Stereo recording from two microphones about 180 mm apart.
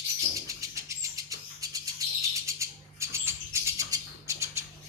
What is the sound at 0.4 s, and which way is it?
Bird, 15° right (ahead or behind).